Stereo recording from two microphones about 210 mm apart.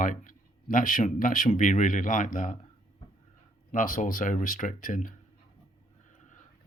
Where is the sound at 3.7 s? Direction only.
40° left (ahead or behind).